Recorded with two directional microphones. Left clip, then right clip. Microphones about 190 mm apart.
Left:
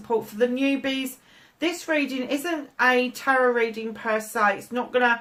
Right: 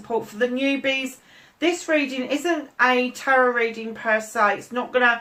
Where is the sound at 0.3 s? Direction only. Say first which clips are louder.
Right 2 dB; 45° left (ahead or behind).